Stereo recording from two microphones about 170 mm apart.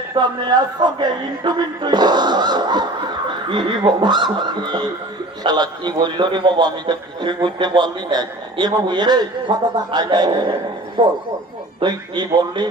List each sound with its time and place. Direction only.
0.1 s a man's voice: 25° right (ahead or behind)